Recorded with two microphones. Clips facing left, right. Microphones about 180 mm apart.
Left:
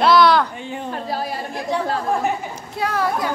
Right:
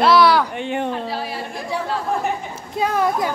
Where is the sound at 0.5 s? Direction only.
70° right (ahead or behind).